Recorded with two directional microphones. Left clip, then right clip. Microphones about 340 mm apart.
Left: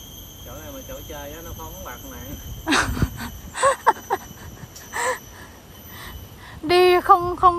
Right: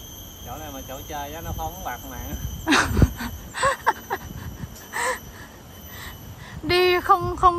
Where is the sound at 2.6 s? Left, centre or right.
Centre.